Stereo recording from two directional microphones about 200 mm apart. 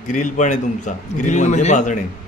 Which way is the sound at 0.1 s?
40° left (ahead or behind).